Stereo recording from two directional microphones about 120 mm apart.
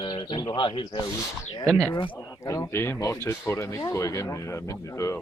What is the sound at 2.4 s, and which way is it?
Speech, 30° left (ahead or behind).